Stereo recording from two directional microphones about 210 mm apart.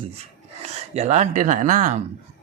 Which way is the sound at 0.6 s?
30° right (ahead or behind).